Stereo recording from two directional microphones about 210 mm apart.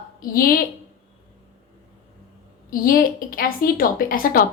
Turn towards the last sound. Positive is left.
turn(degrees=40)  # may be behind; listen again after turning